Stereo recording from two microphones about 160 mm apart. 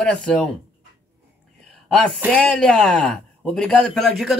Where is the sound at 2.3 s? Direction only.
5° left (ahead or behind).